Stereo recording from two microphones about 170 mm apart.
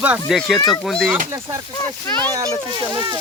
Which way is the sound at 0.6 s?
25° left (ahead or behind).